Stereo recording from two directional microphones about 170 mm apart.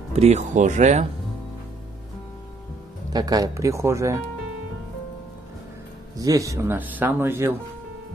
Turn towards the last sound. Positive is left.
turn(degrees=-15)  # may be behind; listen again after turning